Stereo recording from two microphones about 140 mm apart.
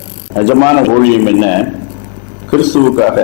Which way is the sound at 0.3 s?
15° left (ahead or behind).